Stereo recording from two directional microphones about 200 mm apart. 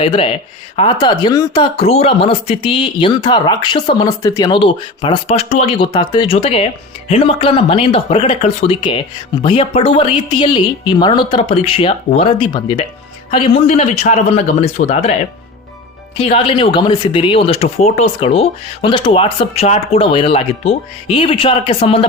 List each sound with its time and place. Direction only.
0.0 s a man's voice: 30° left (ahead or behind)
16.1 s speech: 30° left (ahead or behind)